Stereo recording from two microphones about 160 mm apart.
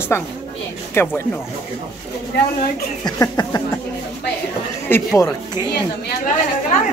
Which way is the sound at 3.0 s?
25° left (ahead or behind).